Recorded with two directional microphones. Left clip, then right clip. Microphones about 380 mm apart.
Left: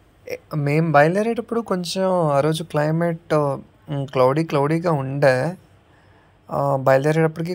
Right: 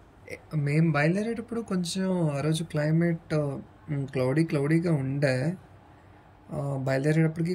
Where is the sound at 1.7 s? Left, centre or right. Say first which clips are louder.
Left 11 dB; centre.